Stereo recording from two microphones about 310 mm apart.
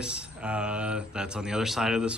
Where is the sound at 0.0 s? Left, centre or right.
Centre.